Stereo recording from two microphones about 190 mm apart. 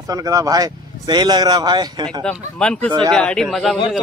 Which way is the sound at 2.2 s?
5° left (ahead or behind).